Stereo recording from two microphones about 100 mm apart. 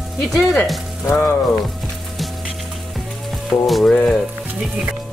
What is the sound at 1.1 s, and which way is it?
Music, 25° left (ahead or behind).